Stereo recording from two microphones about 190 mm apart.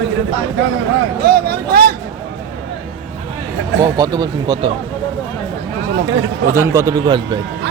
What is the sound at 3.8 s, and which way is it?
Speech, 20° right (ahead or behind).